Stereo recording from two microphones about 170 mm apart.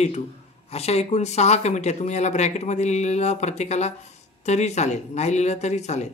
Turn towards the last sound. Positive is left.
turn(degrees=40)  # may be behind; listen again after turning